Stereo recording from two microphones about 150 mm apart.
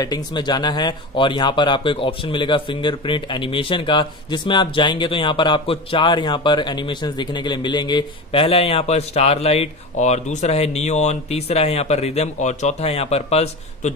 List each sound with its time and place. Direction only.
0.0 s speech: 25° left (ahead or behind); by 13.9 s 45° left (ahead or behind)